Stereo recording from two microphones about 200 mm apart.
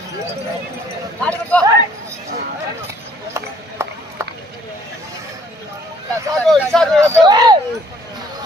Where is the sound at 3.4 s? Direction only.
15° right (ahead or behind).